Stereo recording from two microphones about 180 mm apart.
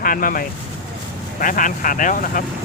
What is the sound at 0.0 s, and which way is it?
Speech, 50° left (ahead or behind).